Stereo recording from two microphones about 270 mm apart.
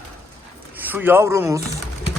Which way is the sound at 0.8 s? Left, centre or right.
Centre.